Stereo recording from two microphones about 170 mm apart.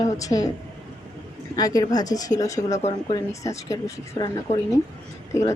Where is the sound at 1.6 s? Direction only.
20° left (ahead or behind).